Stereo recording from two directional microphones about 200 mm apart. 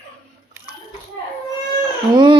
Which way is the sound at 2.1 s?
20° right (ahead or behind).